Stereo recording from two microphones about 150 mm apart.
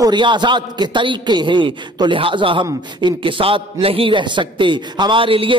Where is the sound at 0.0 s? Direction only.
30° right (ahead or behind).